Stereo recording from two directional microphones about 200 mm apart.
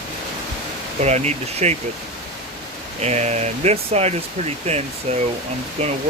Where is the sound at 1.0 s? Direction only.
35° right (ahead or behind).